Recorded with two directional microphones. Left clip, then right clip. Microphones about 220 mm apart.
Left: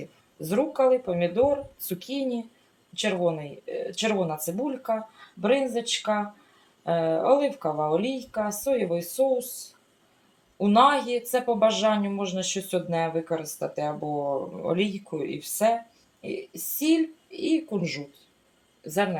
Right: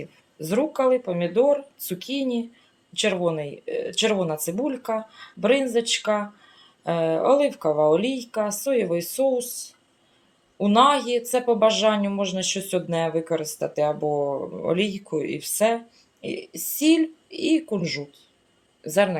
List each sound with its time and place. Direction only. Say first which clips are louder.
0.3 s a woman's voice: right 1 dB; 25° right (ahead or behind)
10.6 s a woman's voice: right 2 dB; 25° right (ahead or behind)